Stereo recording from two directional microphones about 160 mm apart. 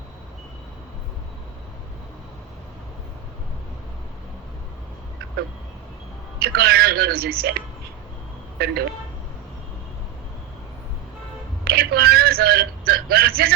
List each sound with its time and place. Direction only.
6.4 s speech: 75° right (ahead or behind)
8.5 s speech: 85° right
11.6 s speech: 75° right (ahead or behind)